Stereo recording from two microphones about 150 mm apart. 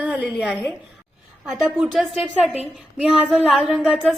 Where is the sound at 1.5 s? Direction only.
Centre (ahead or behind).